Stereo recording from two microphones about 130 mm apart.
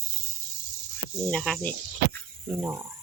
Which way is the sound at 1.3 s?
5° left (ahead or behind).